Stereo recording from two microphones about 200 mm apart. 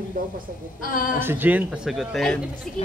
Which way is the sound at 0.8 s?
45° left (ahead or behind).